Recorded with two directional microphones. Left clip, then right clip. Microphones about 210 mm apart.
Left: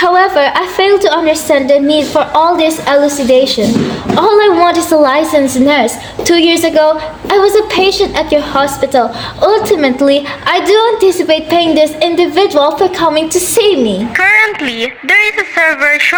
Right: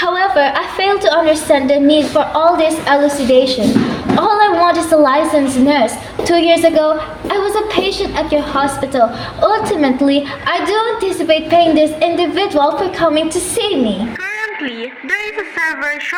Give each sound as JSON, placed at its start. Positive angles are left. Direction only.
{"t": 0.0, "sound": "a woman's voice", "side_deg": 40}